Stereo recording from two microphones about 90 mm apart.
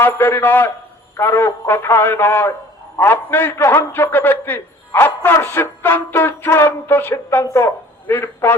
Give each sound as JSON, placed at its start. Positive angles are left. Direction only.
{"t": 0.0, "sound": "music", "side_deg": 25}
{"t": 7.4, "sound": "speech", "side_deg": 30}